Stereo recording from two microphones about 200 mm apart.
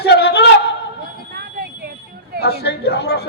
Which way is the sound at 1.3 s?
55° right (ahead or behind).